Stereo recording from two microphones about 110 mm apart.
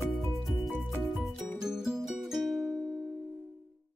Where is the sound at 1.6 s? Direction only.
5° right (ahead or behind).